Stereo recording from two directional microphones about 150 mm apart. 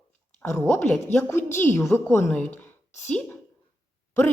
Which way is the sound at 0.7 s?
10° left (ahead or behind).